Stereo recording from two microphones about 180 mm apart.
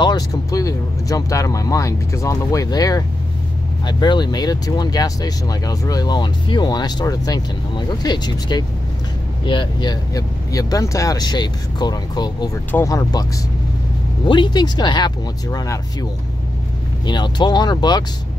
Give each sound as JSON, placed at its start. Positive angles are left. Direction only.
{"t": 0.0, "sound": "speech", "side_deg": 20}
{"t": 14.2, "sound": "speech", "side_deg": 25}